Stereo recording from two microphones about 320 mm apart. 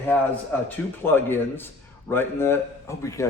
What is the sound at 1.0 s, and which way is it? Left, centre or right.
A man's voice, centre.